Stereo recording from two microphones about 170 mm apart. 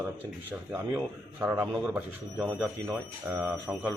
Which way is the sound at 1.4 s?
10° right (ahead or behind).